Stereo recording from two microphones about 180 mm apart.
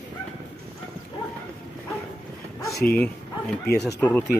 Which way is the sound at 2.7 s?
55° left (ahead or behind).